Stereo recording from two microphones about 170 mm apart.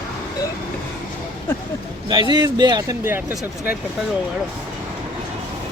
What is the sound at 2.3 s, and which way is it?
Speech, 25° right (ahead or behind).